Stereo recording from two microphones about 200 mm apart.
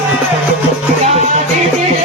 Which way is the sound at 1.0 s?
30° right (ahead or behind).